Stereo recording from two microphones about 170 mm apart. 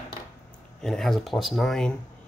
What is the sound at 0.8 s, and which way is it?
Speech, centre (ahead or behind).